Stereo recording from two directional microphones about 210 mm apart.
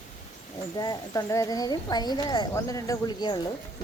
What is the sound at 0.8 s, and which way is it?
Speech, 20° left (ahead or behind).